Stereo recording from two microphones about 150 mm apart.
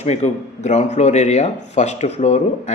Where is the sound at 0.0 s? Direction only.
45° left (ahead or behind).